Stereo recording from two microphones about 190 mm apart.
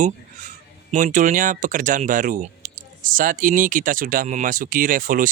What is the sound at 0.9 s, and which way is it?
Speech, 40° right (ahead or behind).